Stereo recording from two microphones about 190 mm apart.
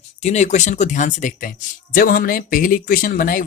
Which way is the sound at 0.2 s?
35° left (ahead or behind).